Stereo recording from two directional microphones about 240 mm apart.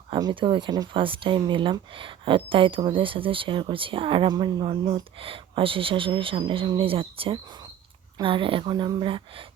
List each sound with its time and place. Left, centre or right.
0.1 s speech: centre